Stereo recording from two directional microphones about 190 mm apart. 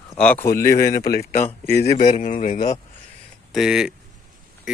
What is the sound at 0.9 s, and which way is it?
Speech, 50° left (ahead or behind).